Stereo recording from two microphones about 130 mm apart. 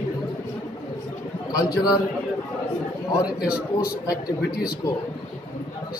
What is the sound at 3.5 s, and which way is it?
A man's voice, 30° left (ahead or behind).